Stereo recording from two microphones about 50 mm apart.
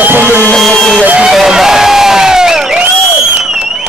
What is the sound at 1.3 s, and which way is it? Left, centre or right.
Crowd, centre.